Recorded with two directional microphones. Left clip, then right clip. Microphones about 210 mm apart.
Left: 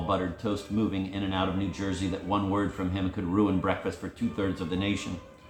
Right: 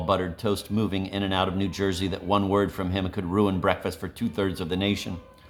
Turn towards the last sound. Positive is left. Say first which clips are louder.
# right 4 dB
turn(degrees=-55)  # may be behind; listen again after turning